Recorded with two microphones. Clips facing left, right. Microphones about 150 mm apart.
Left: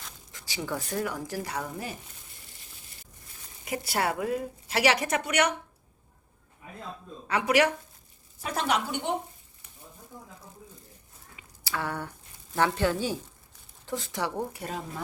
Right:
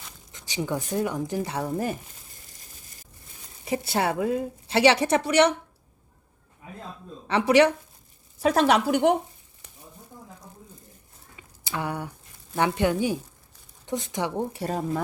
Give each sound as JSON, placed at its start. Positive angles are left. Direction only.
{"t": 0.3, "sound": "speech", "side_deg": -20}
{"t": 1.6, "sound": "speech", "side_deg": -45}
{"t": 3.6, "sound": "a woman's voice", "side_deg": -25}
{"t": 7.3, "sound": "a woman's voice", "side_deg": -30}
{"t": 8.4, "sound": "speech", "side_deg": -90}
{"t": 11.6, "sound": "a woman's voice", "side_deg": -20}